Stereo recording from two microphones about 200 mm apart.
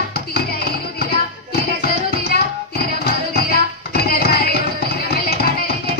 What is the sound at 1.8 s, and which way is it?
Music, 50° left (ahead or behind).